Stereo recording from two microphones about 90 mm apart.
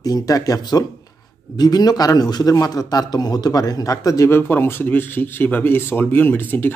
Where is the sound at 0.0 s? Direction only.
40° left (ahead or behind).